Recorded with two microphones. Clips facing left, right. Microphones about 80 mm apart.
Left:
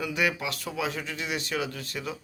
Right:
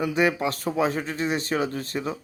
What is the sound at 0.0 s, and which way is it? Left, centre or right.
A man's voice, right.